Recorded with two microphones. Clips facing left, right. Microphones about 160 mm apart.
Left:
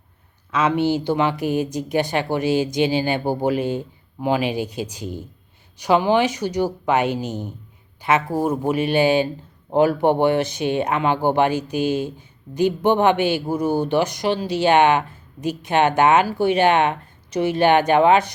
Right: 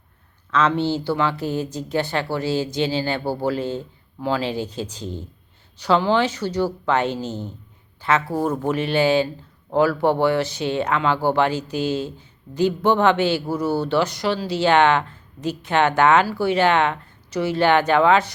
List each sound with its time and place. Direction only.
0.5 s speech: 15° left (ahead or behind)